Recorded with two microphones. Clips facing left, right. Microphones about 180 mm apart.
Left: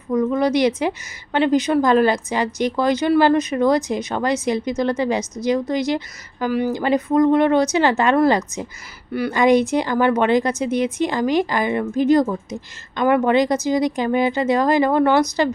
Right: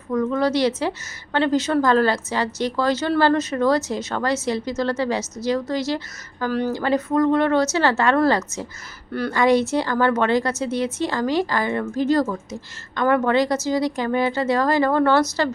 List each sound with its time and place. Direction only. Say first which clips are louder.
0.1 s a woman's voice: left 2 dB; 15° left (ahead or behind)